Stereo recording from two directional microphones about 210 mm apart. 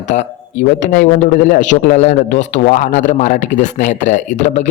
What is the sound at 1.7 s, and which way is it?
A man's voice, 35° left (ahead or behind).